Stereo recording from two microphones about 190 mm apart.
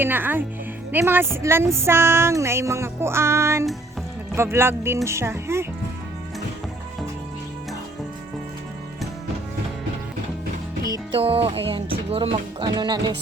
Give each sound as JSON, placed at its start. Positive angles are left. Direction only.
{"t": 0.0, "sound": "speech", "side_deg": -10}
{"t": 10.8, "sound": "music", "side_deg": -20}
{"t": 11.2, "sound": "speech", "side_deg": -30}